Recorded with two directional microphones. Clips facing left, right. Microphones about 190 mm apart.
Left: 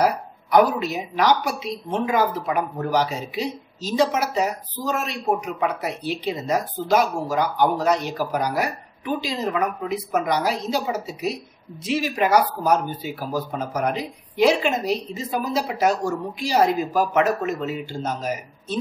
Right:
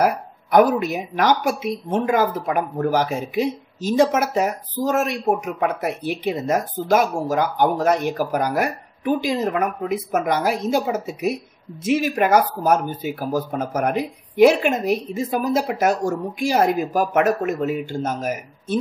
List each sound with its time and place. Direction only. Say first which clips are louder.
0.0 s a woman's voice: right 1 dB; 50° right (ahead or behind)